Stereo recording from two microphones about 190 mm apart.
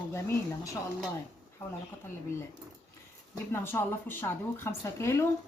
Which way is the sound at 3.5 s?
10° left (ahead or behind).